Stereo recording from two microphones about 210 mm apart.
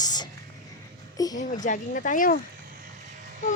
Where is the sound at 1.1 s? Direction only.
15° left (ahead or behind).